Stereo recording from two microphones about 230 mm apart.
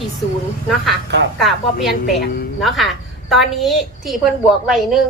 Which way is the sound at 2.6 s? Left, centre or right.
Centre.